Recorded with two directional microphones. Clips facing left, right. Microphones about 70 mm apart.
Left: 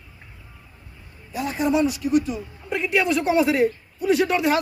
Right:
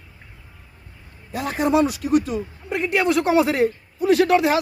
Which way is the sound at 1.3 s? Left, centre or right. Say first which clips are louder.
Right 2 dB; right.